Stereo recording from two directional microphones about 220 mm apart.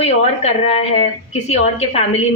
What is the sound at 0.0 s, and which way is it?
A woman's voice, 30° left (ahead or behind).